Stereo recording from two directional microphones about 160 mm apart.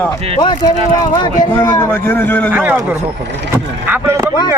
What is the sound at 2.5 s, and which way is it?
Speech, 10° right (ahead or behind).